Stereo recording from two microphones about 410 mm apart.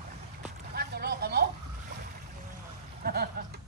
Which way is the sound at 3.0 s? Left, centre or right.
Right.